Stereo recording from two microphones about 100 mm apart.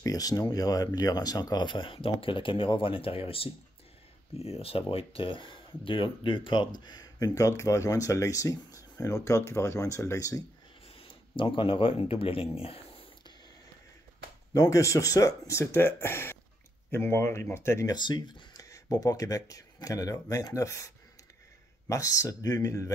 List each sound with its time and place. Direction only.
0.0 s speech: 40° left (ahead or behind); by 3.4 s 70° left (ahead or behind)
4.4 s speech: 80° left; by 10.4 s 35° left (ahead or behind)
11.0 s speech: 60° left (ahead or behind)
14.5 s speech: 35° left (ahead or behind)
17.9 s speech: 50° left (ahead or behind)